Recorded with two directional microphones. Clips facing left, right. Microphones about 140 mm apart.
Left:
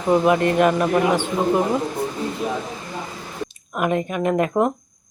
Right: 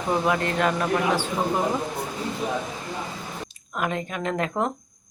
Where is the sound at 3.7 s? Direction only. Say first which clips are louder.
Left 6 dB; 15° left (ahead or behind).